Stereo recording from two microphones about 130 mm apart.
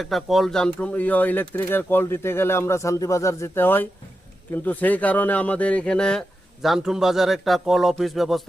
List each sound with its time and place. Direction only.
0.0 s a man's voice: centre (ahead or behind)